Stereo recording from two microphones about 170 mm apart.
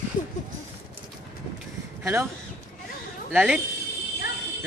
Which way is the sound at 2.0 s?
15° right (ahead or behind).